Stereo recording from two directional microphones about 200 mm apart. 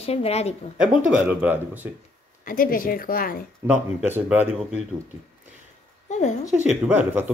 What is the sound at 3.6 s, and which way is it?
Speech, 15° right (ahead or behind).